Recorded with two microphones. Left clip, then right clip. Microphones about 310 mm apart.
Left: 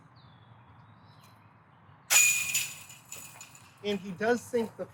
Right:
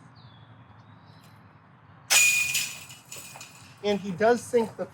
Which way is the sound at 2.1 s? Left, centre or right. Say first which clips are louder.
Right 4 dB; right.